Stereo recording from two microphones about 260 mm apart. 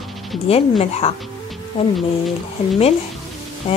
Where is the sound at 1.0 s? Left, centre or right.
Left.